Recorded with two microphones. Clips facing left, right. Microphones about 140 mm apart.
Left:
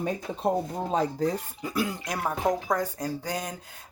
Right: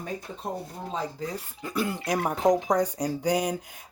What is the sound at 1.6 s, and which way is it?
Speech, 5° left (ahead or behind).